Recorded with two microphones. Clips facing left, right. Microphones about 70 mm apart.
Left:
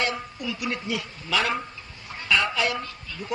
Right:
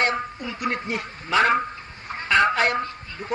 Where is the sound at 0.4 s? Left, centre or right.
Right.